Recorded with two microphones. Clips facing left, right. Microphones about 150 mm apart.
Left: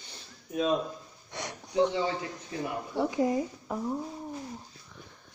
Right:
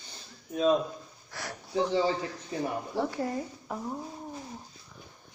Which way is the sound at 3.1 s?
15° left (ahead or behind).